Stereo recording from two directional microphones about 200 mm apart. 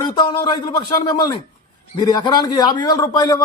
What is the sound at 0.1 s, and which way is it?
A man's voice, 20° left (ahead or behind).